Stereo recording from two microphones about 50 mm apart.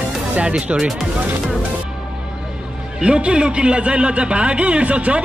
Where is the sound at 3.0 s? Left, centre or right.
Right.